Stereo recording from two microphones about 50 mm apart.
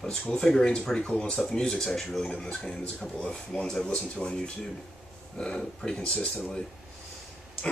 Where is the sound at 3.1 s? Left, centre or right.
Centre.